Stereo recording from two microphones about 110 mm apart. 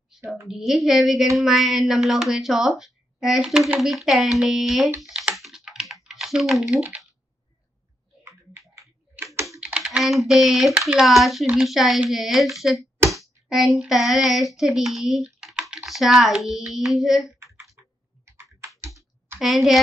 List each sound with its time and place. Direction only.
0.5 s speech: centre (ahead or behind)
5.0 s typing: 5° right (ahead or behind)
8.2 s typing: 20° right (ahead or behind)
9.2 s computer keyboard: 25° right (ahead or behind)
9.5 s typing: 10° right (ahead or behind)
11.0 s speech: centre (ahead or behind)
13.1 s hands: centre (ahead or behind)
17.8 s computer keyboard: 20° right (ahead or behind)
19.4 s speech: centre (ahead or behind)